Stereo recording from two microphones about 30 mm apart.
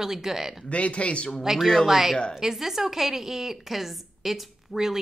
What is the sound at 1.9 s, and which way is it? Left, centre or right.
A woman's voice, centre.